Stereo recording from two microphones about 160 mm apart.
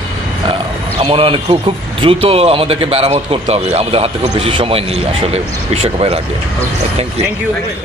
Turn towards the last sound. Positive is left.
turn(degrees=-40)  # may be behind; listen again after turning